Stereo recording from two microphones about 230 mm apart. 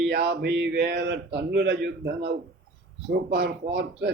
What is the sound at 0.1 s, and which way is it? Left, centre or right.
A man's voice, right.